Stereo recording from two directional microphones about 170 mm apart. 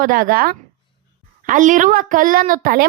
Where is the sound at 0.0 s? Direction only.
55° right (ahead or behind).